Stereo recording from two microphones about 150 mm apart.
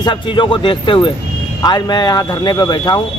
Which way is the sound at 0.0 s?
30° left (ahead or behind).